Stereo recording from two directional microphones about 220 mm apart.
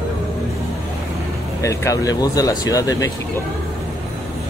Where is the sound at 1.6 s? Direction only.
15° left (ahead or behind).